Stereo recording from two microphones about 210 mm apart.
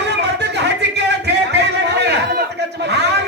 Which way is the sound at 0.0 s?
55° right (ahead or behind).